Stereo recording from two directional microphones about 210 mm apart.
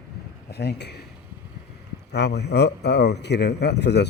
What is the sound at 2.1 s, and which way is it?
A man's voice, 55° left (ahead or behind).